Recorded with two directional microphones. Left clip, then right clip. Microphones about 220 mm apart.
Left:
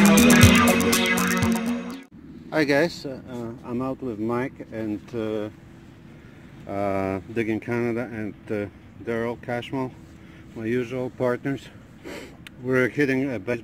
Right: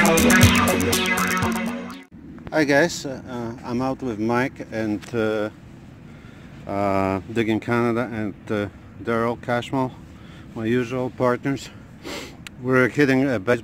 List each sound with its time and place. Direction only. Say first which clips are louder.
0.0 s music: right 1 dB; centre (ahead or behind)
2.5 s speech: right 3 dB; centre (ahead or behind)
4.3 s speech: right 7 dB; 15° right (ahead or behind)
6.7 s speech: right 4 dB; 5° right (ahead or behind)
11.1 s a sound: right 4 dB; centre (ahead or behind)
12.9 s speech: right 4 dB; 15° right (ahead or behind)